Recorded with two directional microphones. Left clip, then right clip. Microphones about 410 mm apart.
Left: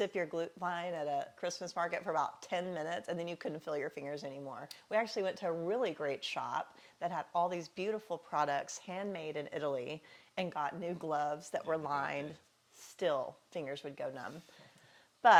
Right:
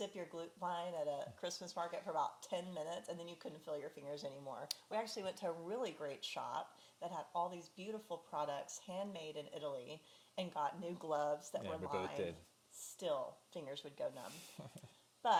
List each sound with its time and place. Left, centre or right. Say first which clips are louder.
0.0 s speech: left 11 dB; left
1.7 s speech: left 7 dB; left
4.1 s speech: left 4 dB; left
13.0 s speech: left 7 dB; left